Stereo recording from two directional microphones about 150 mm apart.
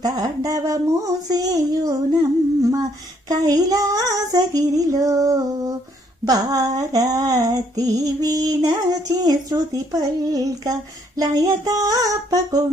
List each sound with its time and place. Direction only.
0.0 s female singing: 25° right (ahead or behind)